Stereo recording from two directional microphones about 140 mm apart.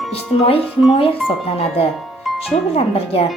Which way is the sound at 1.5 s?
45° left (ahead or behind).